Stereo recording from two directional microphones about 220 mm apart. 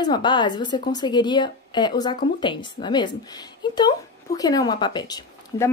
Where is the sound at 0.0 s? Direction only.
20° left (ahead or behind).